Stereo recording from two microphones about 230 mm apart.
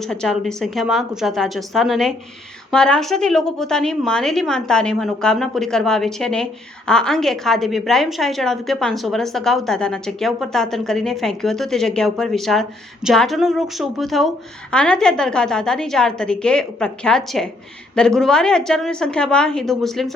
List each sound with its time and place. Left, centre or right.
0.0 s a woman's voice: centre